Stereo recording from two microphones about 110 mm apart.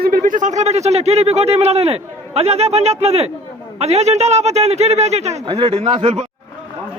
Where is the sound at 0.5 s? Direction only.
90° right.